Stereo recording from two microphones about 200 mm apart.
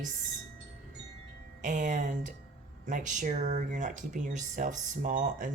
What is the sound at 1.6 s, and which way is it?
Speech, 40° right (ahead or behind).